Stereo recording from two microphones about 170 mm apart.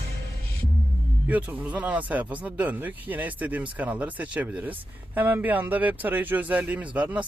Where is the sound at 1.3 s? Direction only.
10° right (ahead or behind).